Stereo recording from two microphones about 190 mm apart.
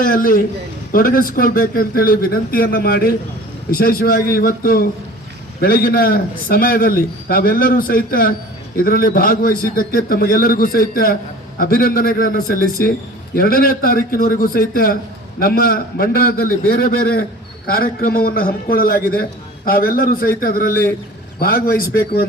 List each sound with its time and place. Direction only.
0.0 s a man's voice: 50° left (ahead or behind)